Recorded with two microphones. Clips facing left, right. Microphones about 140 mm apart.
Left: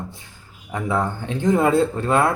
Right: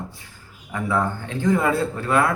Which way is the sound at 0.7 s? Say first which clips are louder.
Even; 20° left (ahead or behind).